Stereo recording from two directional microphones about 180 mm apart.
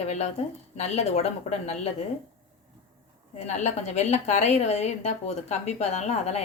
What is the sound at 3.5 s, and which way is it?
A woman's voice, 40° left (ahead or behind).